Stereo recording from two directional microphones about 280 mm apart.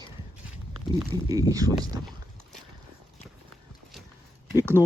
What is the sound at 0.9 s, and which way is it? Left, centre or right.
Speech, centre.